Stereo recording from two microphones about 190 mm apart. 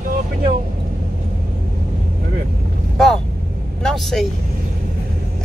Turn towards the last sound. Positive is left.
turn(degrees=0)  # may be behind; listen again after turning